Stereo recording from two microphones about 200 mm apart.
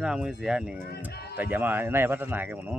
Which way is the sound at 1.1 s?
55° left (ahead or behind).